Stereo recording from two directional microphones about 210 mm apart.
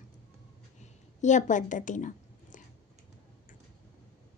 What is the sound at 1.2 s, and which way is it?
A woman's voice, 35° left (ahead or behind).